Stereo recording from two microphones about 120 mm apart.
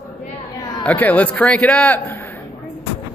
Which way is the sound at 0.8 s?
10° left (ahead or behind).